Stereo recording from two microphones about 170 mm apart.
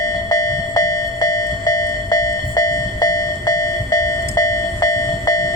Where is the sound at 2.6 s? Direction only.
20° left (ahead or behind).